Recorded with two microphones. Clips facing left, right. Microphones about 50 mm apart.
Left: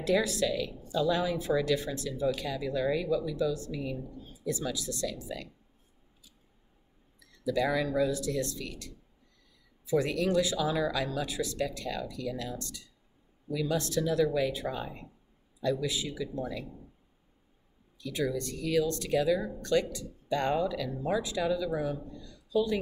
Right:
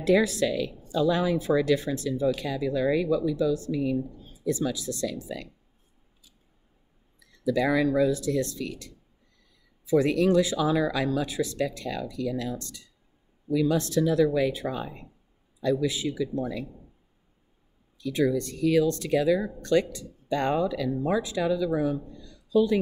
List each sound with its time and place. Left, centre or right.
0.0 s speech: right
7.4 s speech: right
9.9 s speech: right
18.1 s speech: right